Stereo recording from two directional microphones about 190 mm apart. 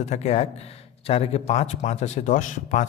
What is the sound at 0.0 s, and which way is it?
A man's voice, 35° left (ahead or behind).